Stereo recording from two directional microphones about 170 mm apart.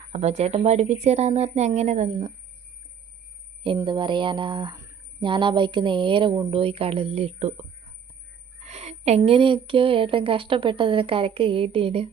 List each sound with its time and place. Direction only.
0.1 s speech: 40° right (ahead or behind)
3.8 s speech: 30° right (ahead or behind)
8.6 s speech: 40° right (ahead or behind)